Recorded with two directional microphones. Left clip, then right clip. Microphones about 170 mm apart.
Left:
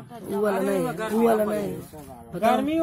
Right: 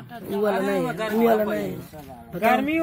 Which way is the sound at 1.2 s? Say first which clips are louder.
Right 1 dB; centre (ahead or behind).